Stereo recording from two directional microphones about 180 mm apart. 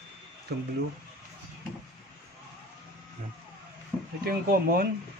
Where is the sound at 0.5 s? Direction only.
65° right (ahead or behind).